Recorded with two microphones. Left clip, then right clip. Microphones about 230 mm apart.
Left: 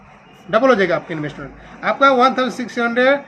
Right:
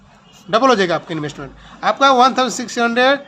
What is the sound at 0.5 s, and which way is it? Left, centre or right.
Speech, right.